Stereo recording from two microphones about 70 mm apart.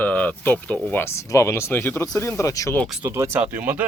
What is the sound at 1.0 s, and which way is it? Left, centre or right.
Speech, left.